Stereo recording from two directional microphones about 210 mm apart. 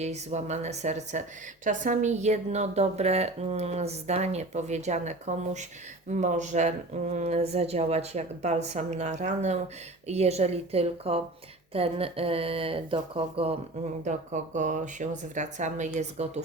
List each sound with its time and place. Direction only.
0.0 s a woman's voice: 35° right (ahead or behind)